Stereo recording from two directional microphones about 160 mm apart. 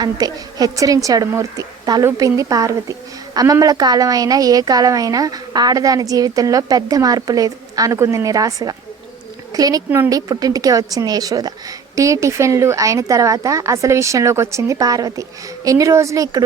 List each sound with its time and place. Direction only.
0.0 s a woman's voice: 25° right (ahead or behind)